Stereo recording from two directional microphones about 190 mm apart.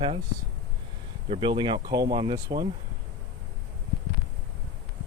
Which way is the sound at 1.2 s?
25° right (ahead or behind).